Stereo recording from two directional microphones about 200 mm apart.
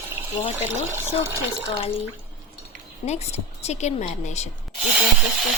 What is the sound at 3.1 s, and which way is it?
A woman's voice, 30° left (ahead or behind).